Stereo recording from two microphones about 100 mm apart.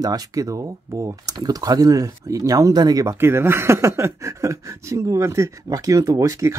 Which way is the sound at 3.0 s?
25° right (ahead or behind).